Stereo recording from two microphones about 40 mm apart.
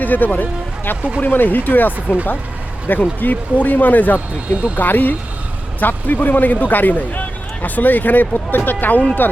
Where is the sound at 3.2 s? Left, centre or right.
Left.